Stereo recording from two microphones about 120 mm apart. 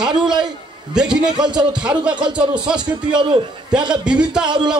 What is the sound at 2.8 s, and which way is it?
Speech, 40° right (ahead or behind).